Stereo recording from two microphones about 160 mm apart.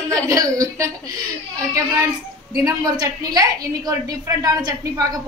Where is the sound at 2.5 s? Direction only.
20° right (ahead or behind).